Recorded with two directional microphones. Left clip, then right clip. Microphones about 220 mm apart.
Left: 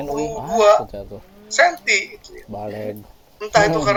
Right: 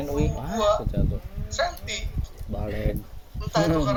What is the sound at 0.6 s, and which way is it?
Speech, 45° left (ahead or behind).